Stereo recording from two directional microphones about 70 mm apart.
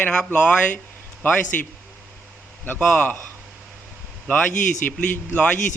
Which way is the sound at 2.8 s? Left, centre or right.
Left.